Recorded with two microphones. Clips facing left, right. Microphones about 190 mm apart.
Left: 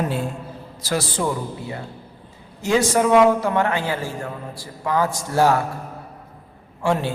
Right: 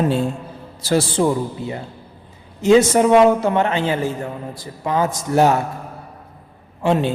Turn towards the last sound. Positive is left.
turn(degrees=-20)  # may be behind; listen again after turning